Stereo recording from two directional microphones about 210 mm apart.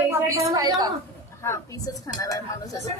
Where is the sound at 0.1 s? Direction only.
15° right (ahead or behind).